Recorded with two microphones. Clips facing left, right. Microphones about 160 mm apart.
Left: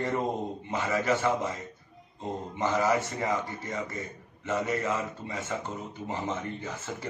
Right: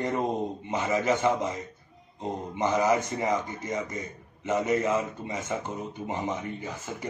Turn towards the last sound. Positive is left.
turn(degrees=-15)  # may be behind; listen again after turning